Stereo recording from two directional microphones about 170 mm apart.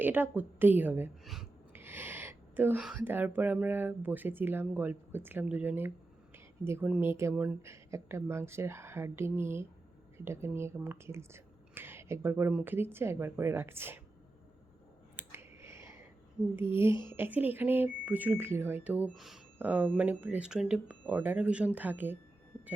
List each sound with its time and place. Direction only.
0.0 s speech: 10° right (ahead or behind)
1.7 s speech: 10° right (ahead or behind)
15.1 s a sound: 15° right (ahead or behind)
16.6 s speech: 15° right (ahead or behind)
16.9 s a woman's voice: 30° left (ahead or behind)
17.2 s speech: 10° right (ahead or behind)